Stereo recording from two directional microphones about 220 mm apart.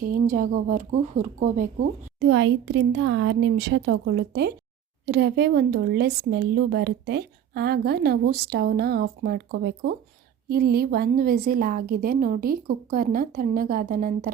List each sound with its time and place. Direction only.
0.0 s a woman's voice: 40° right (ahead or behind)
2.2 s a woman's voice: 55° right (ahead or behind); by 14.3 s 40° right (ahead or behind)